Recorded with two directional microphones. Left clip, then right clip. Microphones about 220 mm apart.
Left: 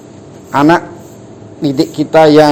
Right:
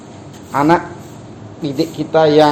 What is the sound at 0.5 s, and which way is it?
A man's voice, 50° left (ahead or behind).